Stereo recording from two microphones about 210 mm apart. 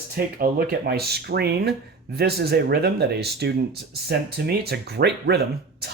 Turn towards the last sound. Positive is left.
turn(degrees=-50)  # may be behind; listen again after turning